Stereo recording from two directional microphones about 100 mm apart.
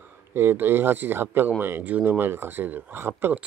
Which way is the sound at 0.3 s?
25° right (ahead or behind).